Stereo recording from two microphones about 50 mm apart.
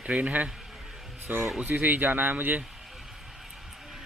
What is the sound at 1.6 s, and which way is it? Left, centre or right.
Speech, right.